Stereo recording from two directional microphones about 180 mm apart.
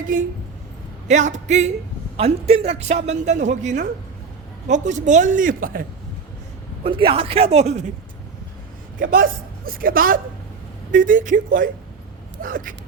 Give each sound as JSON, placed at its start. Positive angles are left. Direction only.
{"t": 1.0, "sound": "speech", "side_deg": -40}
{"t": 6.8, "sound": "speech", "side_deg": -30}
{"t": 9.0, "sound": "a woman's voice", "side_deg": -50}